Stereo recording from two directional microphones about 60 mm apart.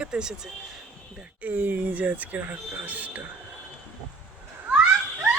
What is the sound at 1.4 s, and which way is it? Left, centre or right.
Speech, right.